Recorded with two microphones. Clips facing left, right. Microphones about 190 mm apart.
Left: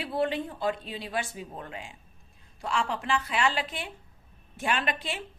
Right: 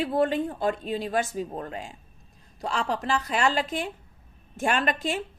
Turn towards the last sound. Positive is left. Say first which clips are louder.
# right 5 dB
turn(degrees=-45)  # may be behind; listen again after turning